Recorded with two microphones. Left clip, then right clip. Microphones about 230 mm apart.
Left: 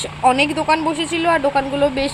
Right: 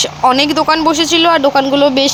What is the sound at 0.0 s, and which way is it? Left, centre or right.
A woman's voice, centre.